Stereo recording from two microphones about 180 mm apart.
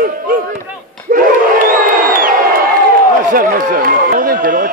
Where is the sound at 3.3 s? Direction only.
50° right (ahead or behind).